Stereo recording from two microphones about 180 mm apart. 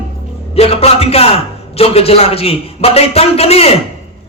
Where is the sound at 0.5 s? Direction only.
35° left (ahead or behind).